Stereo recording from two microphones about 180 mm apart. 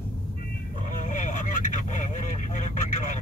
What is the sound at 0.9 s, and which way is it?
Vehicle, 45° left (ahead or behind).